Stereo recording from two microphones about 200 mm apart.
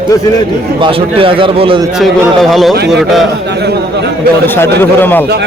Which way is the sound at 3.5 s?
60° right (ahead or behind).